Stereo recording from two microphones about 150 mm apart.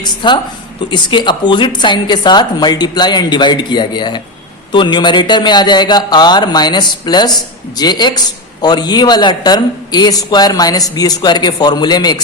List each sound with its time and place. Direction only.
0.0 s a man's voice: 30° left (ahead or behind)